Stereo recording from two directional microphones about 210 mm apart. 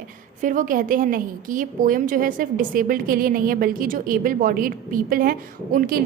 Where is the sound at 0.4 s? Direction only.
40° right (ahead or behind).